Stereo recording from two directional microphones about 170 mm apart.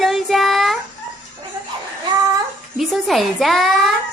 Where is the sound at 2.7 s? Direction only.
Centre (ahead or behind).